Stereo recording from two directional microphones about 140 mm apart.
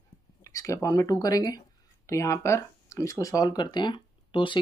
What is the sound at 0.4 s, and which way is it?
Speech, 20° left (ahead or behind).